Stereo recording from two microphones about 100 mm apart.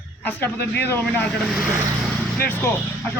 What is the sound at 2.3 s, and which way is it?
Speech, 20° left (ahead or behind).